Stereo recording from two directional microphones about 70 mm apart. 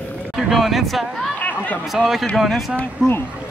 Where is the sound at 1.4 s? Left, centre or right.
Left.